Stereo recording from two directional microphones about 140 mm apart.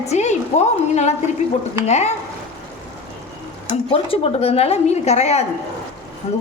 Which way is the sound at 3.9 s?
45° left (ahead or behind).